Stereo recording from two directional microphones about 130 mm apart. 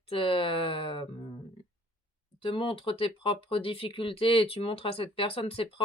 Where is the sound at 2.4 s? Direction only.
40° left (ahead or behind).